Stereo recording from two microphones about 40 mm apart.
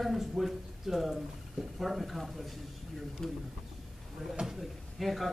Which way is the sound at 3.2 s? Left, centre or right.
Centre.